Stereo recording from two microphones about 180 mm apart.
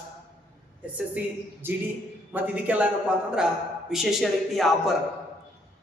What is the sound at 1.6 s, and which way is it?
A man's voice, 10° right (ahead or behind).